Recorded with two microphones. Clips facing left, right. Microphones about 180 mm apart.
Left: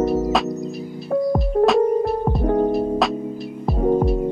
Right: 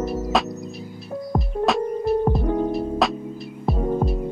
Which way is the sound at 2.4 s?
55° left (ahead or behind).